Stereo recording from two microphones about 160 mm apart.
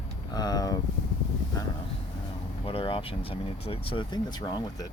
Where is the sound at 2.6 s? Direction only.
35° left (ahead or behind).